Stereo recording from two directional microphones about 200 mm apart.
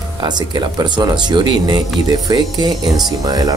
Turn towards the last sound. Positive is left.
turn(degrees=-20)  # may be behind; listen again after turning